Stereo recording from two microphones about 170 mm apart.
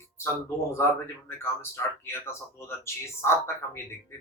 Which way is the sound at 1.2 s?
15° left (ahead or behind).